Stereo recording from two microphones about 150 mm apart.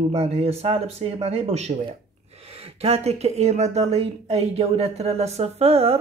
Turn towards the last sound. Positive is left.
turn(degrees=-40)  # may be behind; listen again after turning